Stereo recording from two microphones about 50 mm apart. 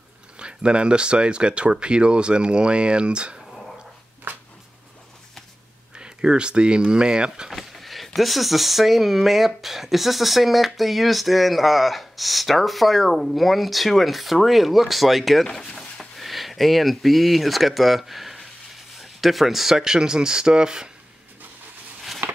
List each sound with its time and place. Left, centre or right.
0.4 s speech: centre
4.3 s a sound: right
5.9 s speech: centre
7.5 s speech: centre